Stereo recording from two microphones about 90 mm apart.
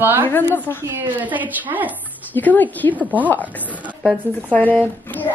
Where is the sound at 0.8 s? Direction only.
20° right (ahead or behind).